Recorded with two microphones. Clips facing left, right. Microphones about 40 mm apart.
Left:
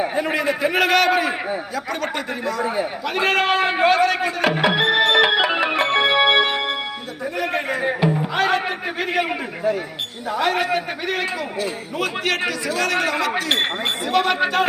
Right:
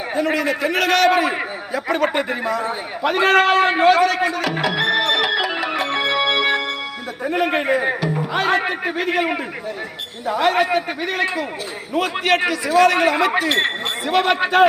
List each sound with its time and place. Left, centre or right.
0.2 s a man's voice: centre
1.7 s speech: centre
3.2 s a man's voice: centre
4.6 s music: centre
7.7 s a man's voice: centre